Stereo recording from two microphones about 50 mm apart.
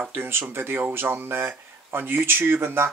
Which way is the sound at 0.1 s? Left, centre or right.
Right.